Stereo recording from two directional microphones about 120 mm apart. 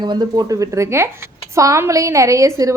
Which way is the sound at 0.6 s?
25° right (ahead or behind).